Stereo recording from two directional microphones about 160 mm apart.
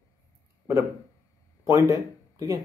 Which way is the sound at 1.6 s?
20° right (ahead or behind).